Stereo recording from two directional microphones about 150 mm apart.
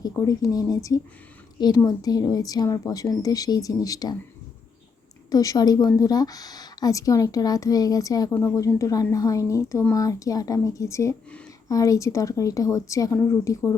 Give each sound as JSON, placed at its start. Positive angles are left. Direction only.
{"t": 0.0, "sound": "a woman's voice", "side_deg": 25}
{"t": 5.3, "sound": "a woman's voice", "side_deg": 25}